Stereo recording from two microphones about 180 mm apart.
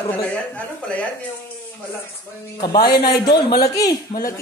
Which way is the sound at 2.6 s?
25° left (ahead or behind).